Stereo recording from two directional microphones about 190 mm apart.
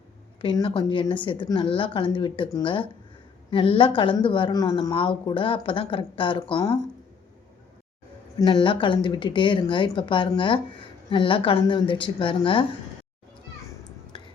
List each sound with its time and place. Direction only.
0.4 s speech: 25° left (ahead or behind)
8.4 s speech: 25° left (ahead or behind)